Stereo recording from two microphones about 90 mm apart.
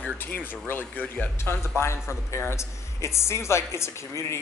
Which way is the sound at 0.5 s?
20° left (ahead or behind).